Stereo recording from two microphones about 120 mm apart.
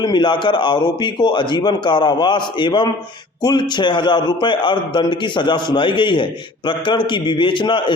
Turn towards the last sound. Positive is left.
turn(degrees=40)  # may be behind; listen again after turning